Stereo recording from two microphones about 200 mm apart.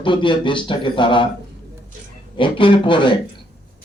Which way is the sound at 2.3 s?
25° left (ahead or behind).